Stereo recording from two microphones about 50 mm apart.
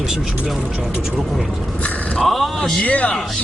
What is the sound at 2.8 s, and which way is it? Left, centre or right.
Speech, left.